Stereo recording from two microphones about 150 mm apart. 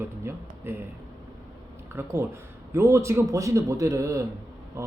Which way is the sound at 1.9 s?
15° right (ahead or behind).